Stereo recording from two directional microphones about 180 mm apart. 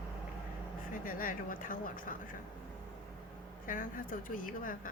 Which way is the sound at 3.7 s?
50° left (ahead or behind).